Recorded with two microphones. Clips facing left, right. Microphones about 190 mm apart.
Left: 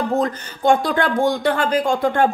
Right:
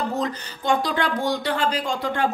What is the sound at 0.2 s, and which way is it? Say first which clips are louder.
A woman's voice: left 7 dB; 50° left (ahead or behind).